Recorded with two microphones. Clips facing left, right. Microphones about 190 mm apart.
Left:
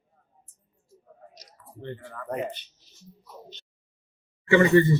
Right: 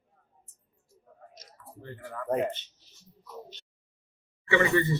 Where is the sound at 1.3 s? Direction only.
30° left (ahead or behind).